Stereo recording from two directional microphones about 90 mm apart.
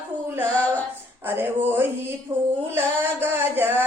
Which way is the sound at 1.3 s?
25° right (ahead or behind).